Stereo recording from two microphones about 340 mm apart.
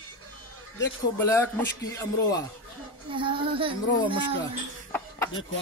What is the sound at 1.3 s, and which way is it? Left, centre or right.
Speech, centre.